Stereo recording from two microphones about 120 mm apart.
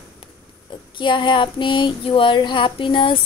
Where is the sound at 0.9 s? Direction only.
40° left (ahead or behind).